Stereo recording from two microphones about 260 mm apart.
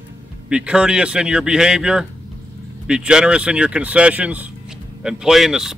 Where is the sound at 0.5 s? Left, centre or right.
Centre.